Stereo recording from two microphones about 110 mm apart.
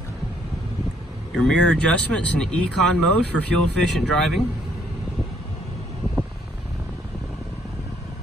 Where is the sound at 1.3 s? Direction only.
5° left (ahead or behind).